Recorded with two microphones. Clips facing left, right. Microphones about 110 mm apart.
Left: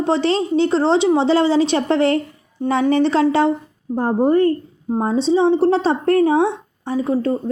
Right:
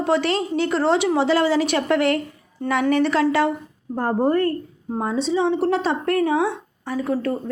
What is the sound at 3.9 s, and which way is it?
Speech, 15° left (ahead or behind).